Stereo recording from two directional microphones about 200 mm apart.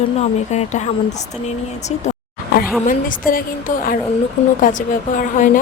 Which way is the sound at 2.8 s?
45° left (ahead or behind).